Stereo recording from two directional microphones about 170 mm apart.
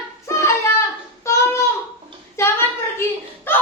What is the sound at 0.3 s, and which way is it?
Child singing, 15° left (ahead or behind).